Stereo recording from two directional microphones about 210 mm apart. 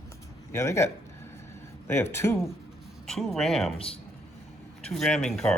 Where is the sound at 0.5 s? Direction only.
15° left (ahead or behind).